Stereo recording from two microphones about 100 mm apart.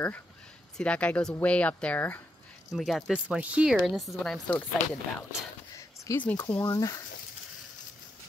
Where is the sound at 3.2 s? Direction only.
15° right (ahead or behind).